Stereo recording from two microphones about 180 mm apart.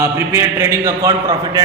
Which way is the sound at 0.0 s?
15° right (ahead or behind).